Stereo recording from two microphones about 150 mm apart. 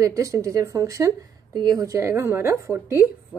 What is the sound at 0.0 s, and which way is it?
A woman's voice, 20° right (ahead or behind).